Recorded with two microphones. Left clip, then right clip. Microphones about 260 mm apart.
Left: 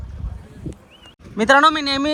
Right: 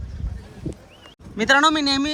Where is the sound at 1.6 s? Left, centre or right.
Centre.